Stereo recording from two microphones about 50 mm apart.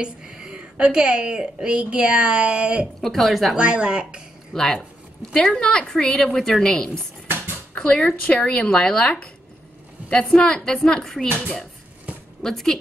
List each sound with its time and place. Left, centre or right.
0.0 s a woman's voice: centre
3.0 s speech: centre
3.5 s a woman's voice: right
4.6 s speech: centre
5.3 s a woman's voice: centre
10.0 s a woman's voice: left
12.4 s a woman's voice: centre